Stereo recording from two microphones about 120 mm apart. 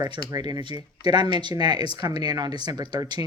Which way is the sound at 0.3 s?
35° right (ahead or behind).